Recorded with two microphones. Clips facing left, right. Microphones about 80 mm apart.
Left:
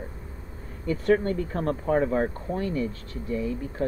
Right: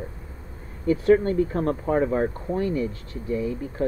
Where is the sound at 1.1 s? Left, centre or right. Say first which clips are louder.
Right 4 dB; right.